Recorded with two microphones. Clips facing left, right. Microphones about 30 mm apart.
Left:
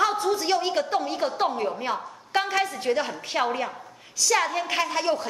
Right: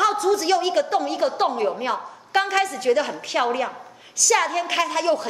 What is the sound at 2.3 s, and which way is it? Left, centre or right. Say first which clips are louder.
Speech: right 4 dB; right.